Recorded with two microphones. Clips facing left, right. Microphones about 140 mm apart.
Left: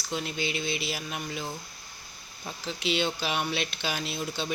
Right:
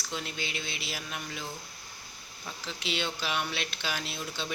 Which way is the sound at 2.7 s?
20° left (ahead or behind).